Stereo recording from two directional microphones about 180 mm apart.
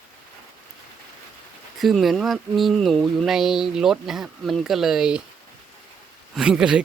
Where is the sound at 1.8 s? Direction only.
Centre (ahead or behind).